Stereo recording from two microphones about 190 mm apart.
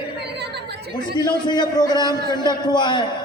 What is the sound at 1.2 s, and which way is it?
A man's voice, 20° left (ahead or behind).